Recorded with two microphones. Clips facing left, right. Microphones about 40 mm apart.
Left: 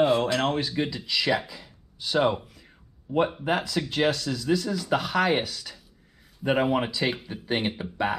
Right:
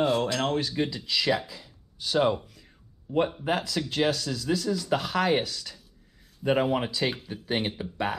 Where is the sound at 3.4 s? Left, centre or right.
Centre.